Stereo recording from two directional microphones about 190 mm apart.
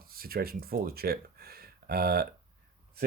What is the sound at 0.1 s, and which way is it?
Speech, 50° right (ahead or behind).